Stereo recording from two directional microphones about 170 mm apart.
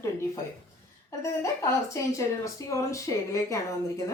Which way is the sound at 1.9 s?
20° left (ahead or behind).